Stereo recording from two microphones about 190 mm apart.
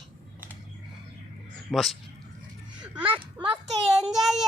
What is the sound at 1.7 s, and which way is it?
Child singing, centre (ahead or behind).